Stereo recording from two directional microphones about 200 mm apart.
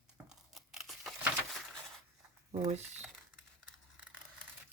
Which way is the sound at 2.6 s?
35° right (ahead or behind).